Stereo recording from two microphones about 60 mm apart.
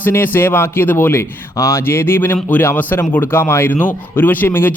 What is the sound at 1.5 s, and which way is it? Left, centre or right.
Speech, left.